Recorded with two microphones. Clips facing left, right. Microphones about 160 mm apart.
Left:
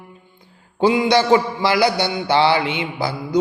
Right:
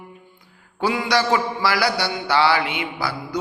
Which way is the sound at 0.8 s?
25° left (ahead or behind).